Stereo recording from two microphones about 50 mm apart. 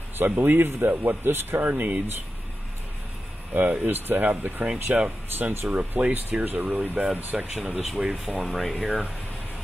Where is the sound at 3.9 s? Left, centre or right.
Right.